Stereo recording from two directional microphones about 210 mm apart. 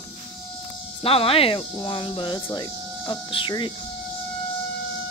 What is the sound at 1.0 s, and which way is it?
Speech, 25° left (ahead or behind).